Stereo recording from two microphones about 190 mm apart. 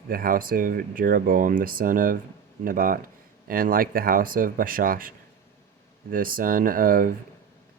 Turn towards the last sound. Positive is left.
turn(degrees=-50)  # may be behind; listen again after turning